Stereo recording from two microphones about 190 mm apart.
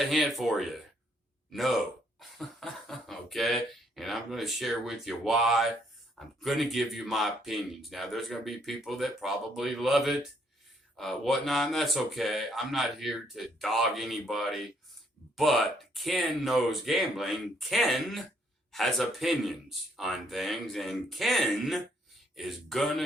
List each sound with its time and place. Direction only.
0.1 s speech: centre (ahead or behind)